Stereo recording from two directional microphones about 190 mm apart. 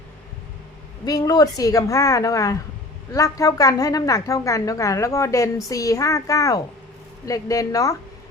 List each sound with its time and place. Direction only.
1.0 s a woman's voice: 20° left (ahead or behind)